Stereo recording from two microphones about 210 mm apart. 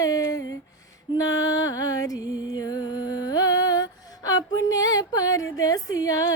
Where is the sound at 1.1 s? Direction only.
15° left (ahead or behind).